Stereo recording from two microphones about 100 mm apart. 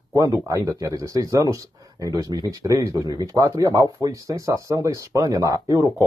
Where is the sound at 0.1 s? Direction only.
35° right (ahead or behind).